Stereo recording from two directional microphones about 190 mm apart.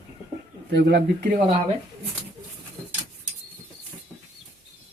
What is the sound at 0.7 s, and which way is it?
Speech, 55° right (ahead or behind).